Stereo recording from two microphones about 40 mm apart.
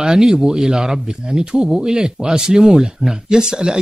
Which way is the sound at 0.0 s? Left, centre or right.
Centre.